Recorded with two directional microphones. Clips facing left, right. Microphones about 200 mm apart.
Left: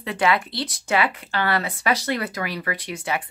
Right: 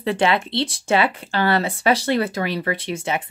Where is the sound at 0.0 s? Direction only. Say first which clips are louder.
Right 3 dB; 30° right (ahead or behind).